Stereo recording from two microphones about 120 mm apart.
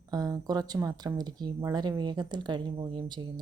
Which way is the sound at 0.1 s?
30° right (ahead or behind).